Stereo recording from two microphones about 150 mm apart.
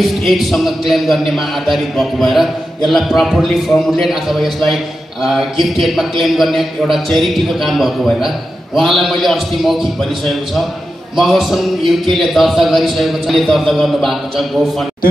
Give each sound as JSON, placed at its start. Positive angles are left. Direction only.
{"t": 0.0, "sound": "a man's voice", "side_deg": 0}